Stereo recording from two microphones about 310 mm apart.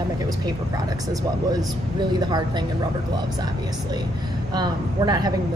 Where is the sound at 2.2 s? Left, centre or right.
Centre.